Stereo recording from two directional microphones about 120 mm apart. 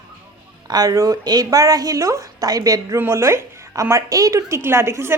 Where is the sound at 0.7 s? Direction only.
30° right (ahead or behind).